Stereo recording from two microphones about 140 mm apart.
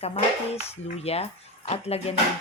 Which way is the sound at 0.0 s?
45° left (ahead or behind).